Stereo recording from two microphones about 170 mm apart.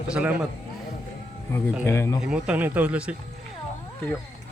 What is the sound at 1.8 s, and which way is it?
Speech, 15° left (ahead or behind).